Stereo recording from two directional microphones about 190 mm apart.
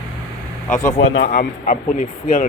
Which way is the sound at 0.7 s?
15° left (ahead or behind).